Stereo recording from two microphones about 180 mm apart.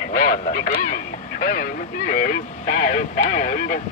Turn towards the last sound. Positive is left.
turn(degrees=50)  # may be behind; listen again after turning